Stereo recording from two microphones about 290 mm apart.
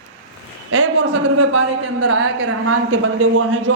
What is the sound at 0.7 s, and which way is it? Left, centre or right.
A man's voice, right.